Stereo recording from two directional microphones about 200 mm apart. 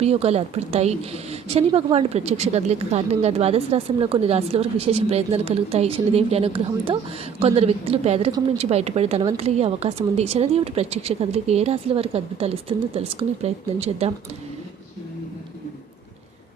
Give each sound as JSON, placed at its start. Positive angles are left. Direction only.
{"t": 0.0, "sound": "a woman's voice", "side_deg": -30}